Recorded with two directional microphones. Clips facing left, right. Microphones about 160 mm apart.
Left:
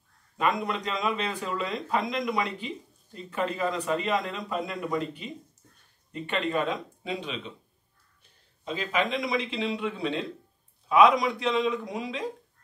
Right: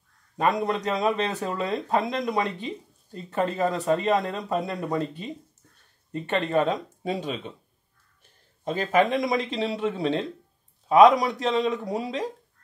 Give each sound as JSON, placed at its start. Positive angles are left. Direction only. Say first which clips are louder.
{"t": 0.4, "sound": "speech", "louder": "right 4 dB", "side_deg": -40}
{"t": 6.1, "sound": "speech", "louder": "right 4 dB", "side_deg": -40}
{"t": 8.6, "sound": "speech", "louder": "right 6 dB", "side_deg": -50}